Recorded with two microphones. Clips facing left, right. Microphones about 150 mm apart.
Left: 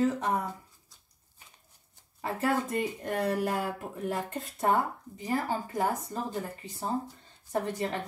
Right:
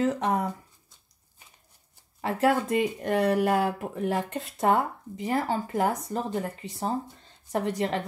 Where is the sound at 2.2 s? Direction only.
85° right.